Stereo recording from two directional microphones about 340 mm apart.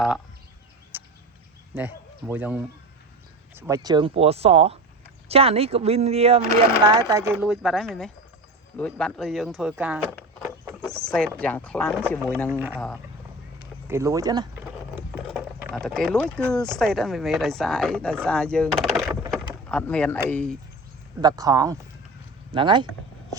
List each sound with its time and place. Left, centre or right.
0.9 s a sound: centre
1.7 s a man's voice: centre
19.3 s door: centre
20.3 s speech: centre
21.2 s speech: centre